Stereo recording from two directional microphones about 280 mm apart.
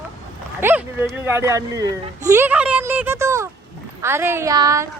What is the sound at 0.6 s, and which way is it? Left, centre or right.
Speech, centre.